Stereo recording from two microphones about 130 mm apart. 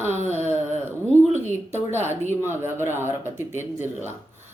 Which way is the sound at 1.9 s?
15° right (ahead or behind).